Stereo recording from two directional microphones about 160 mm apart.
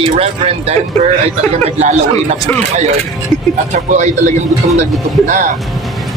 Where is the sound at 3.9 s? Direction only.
45° right (ahead or behind).